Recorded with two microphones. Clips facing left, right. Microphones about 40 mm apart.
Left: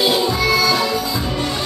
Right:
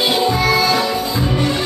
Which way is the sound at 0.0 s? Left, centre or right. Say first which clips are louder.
Right 1 dB; centre.